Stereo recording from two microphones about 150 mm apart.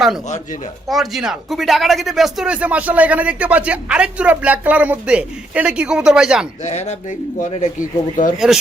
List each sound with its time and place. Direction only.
0.9 s speech: centre (ahead or behind)
6.7 s speech: 50° left (ahead or behind)